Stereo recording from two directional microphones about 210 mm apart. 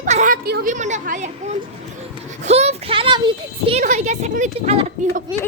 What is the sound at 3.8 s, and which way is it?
Speech, 35° right (ahead or behind).